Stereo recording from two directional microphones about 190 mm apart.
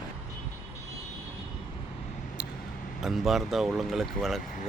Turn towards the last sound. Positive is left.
turn(degrees=0)  # may be behind; listen again after turning